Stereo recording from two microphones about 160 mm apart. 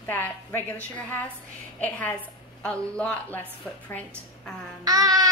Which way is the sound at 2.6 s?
5° left (ahead or behind).